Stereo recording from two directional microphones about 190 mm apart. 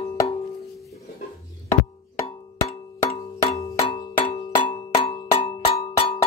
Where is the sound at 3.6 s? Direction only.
15° left (ahead or behind).